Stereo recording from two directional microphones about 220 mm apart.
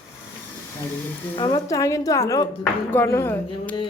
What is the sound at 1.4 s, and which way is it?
A woman's voice, 15° left (ahead or behind).